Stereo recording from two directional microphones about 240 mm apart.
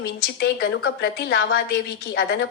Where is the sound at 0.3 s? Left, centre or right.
Left.